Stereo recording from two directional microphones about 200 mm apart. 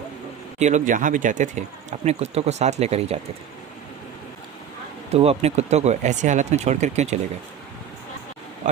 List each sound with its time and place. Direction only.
0.6 s speech: 40° right (ahead or behind)
5.1 s speech: 30° right (ahead or behind)